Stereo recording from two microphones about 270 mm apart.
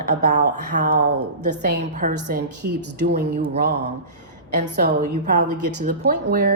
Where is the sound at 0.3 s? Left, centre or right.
Right.